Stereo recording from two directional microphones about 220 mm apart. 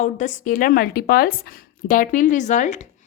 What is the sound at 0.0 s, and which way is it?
Speech, 35° left (ahead or behind).